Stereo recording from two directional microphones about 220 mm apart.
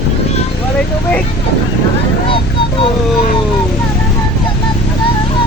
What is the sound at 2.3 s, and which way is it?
Vehicle, 25° left (ahead or behind).